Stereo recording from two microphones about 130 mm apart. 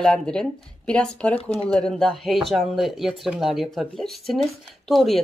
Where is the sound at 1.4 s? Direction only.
50° left (ahead or behind).